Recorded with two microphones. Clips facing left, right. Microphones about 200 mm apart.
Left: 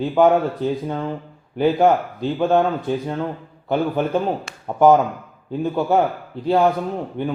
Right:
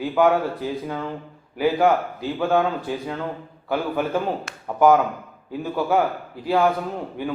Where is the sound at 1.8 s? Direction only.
20° left (ahead or behind).